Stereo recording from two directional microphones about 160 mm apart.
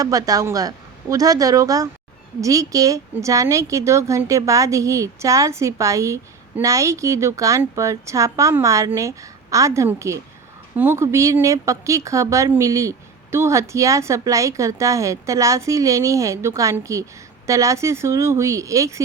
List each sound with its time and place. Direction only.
0.0 s speech: 20° right (ahead or behind)